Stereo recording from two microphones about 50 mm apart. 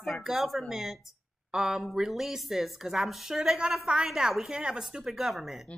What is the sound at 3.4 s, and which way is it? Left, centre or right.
Speech, centre.